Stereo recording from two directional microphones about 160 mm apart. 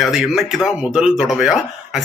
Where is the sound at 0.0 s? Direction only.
Centre (ahead or behind).